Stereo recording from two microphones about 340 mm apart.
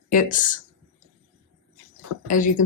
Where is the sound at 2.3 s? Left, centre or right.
Left.